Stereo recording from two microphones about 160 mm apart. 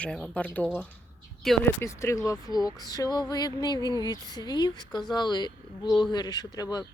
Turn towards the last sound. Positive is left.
turn(degrees=25)  # may be behind; listen again after turning